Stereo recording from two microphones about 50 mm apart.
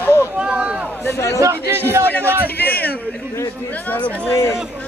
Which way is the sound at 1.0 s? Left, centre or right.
Left.